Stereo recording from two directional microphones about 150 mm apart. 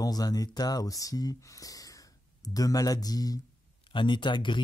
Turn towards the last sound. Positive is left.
turn(degrees=30)  # may be behind; listen again after turning